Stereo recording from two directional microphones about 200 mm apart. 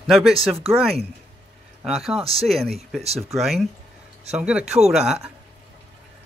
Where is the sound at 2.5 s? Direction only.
Centre (ahead or behind).